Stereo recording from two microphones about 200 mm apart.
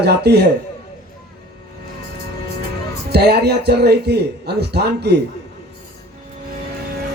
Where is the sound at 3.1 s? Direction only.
55° right (ahead or behind).